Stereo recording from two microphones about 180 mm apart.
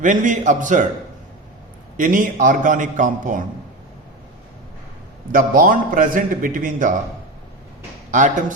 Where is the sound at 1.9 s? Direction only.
50° right (ahead or behind).